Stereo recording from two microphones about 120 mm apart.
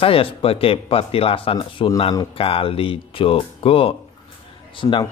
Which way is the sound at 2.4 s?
50° left (ahead or behind).